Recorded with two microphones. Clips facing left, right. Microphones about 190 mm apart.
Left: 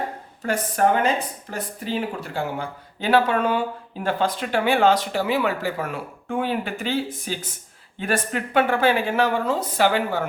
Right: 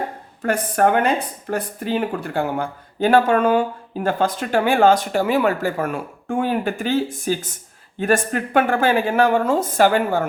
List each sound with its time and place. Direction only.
0.4 s a woman's voice: 55° right (ahead or behind)